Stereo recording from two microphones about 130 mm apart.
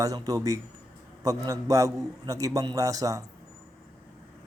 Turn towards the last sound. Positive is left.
turn(degrees=-25)  # may be behind; listen again after turning